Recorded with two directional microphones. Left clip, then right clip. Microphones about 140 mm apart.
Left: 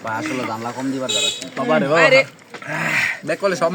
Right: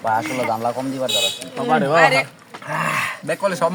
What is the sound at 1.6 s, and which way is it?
Speech, 20° right (ahead or behind).